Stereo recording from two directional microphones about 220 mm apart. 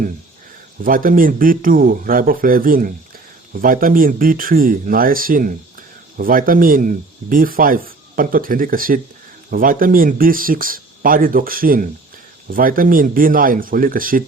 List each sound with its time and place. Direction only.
0.9 s speech: 40° right (ahead or behind)